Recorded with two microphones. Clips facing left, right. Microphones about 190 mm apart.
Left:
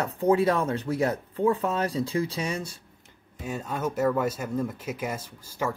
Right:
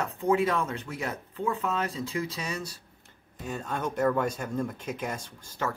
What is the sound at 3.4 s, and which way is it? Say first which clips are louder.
Speech: left 2 dB; 10° left (ahead or behind).